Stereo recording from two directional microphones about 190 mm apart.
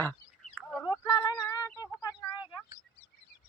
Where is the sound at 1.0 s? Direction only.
20° left (ahead or behind).